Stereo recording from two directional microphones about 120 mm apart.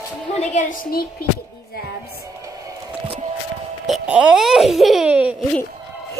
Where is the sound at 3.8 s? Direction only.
5° right (ahead or behind).